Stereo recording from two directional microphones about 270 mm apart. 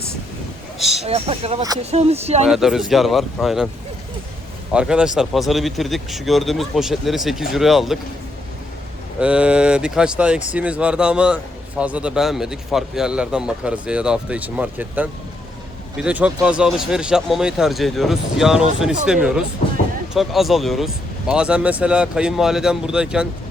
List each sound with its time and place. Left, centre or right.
0.8 s speech: centre
1.0 s speech: right
2.5 s speech: centre
4.7 s speech: centre
9.2 s speech: centre